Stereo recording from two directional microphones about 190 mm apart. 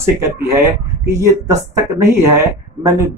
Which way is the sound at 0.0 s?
15° right (ahead or behind).